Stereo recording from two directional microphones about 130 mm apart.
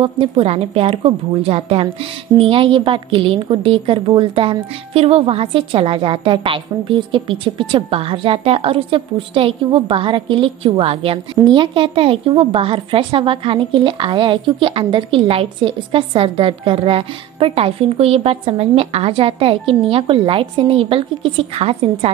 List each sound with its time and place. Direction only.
0.0 s a woman's voice: 45° right (ahead or behind)